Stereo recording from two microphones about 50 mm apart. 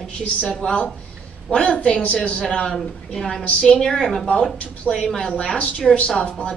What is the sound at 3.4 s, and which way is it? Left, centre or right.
Speech, centre.